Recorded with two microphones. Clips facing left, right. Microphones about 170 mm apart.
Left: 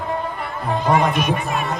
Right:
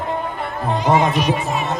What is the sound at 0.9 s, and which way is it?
Speech, 20° right (ahead or behind).